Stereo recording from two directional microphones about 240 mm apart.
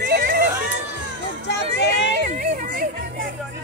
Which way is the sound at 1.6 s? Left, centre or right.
Right.